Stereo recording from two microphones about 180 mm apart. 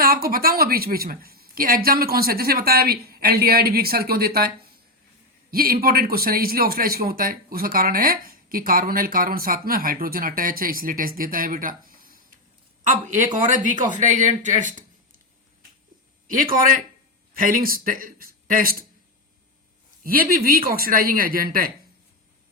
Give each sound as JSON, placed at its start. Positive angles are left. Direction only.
{"t": 0.0, "sound": "a woman's voice", "side_deg": -55}
{"t": 16.2, "sound": "a man's voice", "side_deg": -50}
{"t": 20.1, "sound": "a man's voice", "side_deg": -55}